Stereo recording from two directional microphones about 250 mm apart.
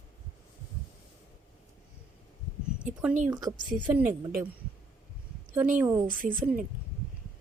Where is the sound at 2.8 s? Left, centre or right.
Centre.